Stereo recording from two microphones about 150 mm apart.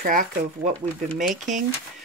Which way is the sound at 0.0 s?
65° right (ahead or behind).